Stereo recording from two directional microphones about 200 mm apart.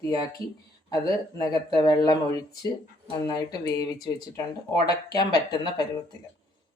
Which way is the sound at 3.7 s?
20° left (ahead or behind).